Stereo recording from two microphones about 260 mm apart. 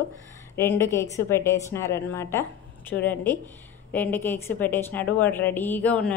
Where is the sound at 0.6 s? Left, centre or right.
Centre.